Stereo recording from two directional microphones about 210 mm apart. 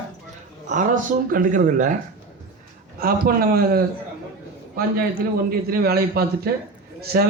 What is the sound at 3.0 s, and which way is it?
Speech, 45° right (ahead or behind).